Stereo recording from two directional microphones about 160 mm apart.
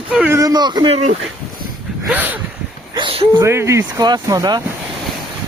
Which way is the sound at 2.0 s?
10° right (ahead or behind).